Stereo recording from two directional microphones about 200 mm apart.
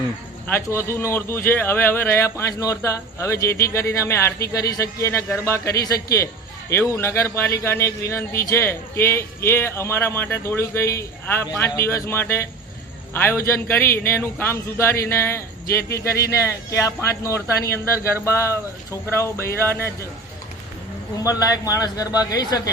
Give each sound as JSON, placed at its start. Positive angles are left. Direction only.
{"t": 0.4, "sound": "a man's voice", "side_deg": 10}
{"t": 21.2, "sound": "a man's voice", "side_deg": 20}